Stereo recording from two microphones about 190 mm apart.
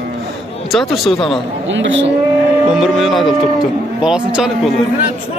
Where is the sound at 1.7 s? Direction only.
75° right (ahead or behind).